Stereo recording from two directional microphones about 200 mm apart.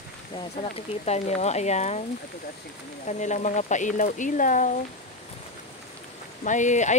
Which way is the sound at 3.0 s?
35° left (ahead or behind).